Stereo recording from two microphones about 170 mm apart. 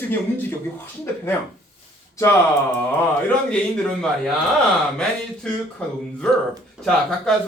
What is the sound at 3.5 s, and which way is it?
Speech, 5° left (ahead or behind).